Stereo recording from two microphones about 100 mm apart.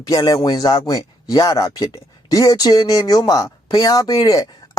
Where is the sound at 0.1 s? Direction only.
40° left (ahead or behind).